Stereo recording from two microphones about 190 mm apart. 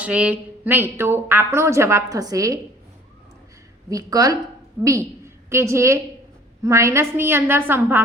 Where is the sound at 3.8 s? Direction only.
20° right (ahead or behind).